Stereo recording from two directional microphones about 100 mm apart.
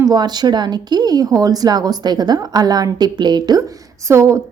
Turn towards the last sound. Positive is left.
turn(degrees=-30)  # may be behind; listen again after turning